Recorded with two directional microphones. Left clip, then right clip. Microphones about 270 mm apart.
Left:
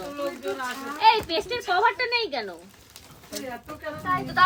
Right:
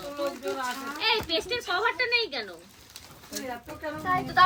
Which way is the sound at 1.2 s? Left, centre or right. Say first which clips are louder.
Left 2 dB; left.